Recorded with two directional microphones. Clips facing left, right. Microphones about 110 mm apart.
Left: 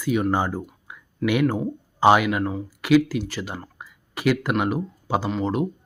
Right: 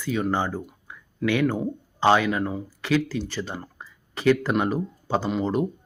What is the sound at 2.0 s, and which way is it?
Speech, 10° left (ahead or behind).